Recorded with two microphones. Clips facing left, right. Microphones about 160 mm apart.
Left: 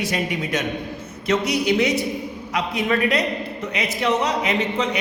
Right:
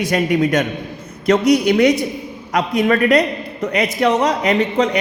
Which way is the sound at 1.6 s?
60° right (ahead or behind).